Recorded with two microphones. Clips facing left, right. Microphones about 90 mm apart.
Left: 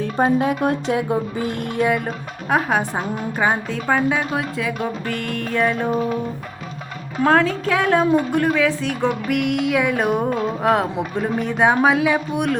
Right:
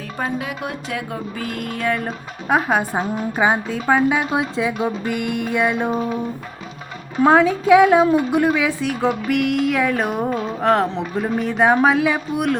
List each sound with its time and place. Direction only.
0.0 s speech: 35° left (ahead or behind)
1.9 s a woman's voice: centre (ahead or behind)
4.3 s music: 20° right (ahead or behind)
7.2 s a woman's voice: 5° right (ahead or behind)